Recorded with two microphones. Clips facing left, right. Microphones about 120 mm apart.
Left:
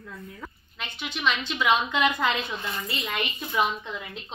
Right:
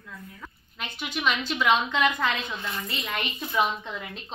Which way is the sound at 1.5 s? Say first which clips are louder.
Even; 5° left (ahead or behind).